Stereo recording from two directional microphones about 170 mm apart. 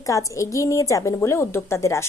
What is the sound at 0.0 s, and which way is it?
A woman's voice, 20° left (ahead or behind).